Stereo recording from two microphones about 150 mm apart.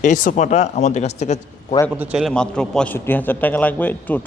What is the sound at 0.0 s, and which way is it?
Speech, 60° left (ahead or behind).